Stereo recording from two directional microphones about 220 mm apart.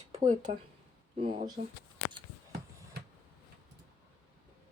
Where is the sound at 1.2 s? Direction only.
20° right (ahead or behind).